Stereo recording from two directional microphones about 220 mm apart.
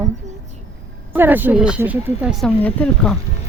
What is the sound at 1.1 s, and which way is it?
Speech, 10° right (ahead or behind).